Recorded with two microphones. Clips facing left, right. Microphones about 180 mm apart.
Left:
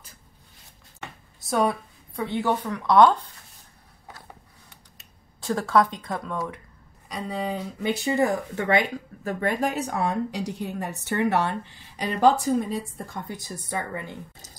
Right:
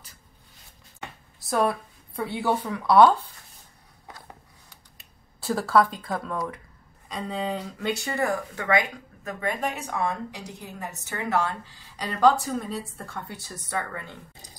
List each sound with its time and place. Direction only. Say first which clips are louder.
1.4 s speech: left 1 dB; centre (ahead or behind)
5.4 s speech: even; 5° right (ahead or behind); by 11.5 s 30° left (ahead or behind)
12.0 s a woman's voice: left 1 dB; 20° left (ahead or behind)